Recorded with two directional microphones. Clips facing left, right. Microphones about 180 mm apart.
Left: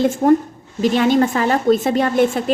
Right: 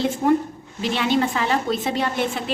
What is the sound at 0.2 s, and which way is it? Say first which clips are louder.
A woman's voice: left 3 dB; 45° left (ahead or behind).